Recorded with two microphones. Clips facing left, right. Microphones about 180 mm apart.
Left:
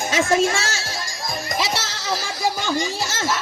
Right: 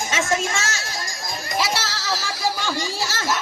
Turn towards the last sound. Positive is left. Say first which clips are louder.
# left 2 dB
turn(degrees=25)  # may be behind; listen again after turning